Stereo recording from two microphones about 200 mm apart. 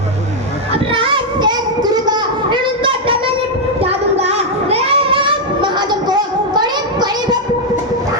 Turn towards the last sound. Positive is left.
turn(degrees=-20)  # may be behind; listen again after turning